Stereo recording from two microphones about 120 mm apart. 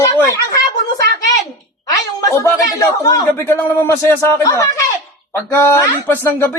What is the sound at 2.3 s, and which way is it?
A man's voice, 25° left (ahead or behind).